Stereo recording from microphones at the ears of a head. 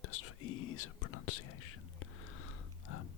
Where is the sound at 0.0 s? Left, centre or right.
Left.